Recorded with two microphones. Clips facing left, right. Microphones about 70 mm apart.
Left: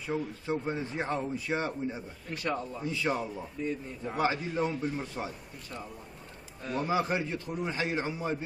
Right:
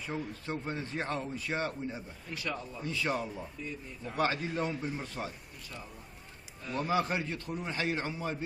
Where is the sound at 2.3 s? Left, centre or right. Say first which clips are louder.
Left 5 dB; left.